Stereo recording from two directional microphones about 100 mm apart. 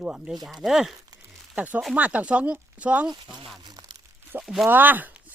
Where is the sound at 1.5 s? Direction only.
15° right (ahead or behind).